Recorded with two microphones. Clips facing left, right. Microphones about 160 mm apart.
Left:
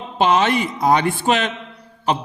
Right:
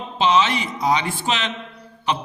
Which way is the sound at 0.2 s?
50° left (ahead or behind).